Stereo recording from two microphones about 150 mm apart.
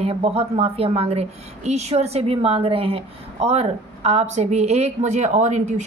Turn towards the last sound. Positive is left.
turn(degrees=-50)  # may be behind; listen again after turning